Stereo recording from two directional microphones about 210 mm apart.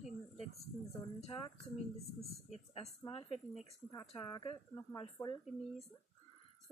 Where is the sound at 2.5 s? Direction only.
30° left (ahead or behind).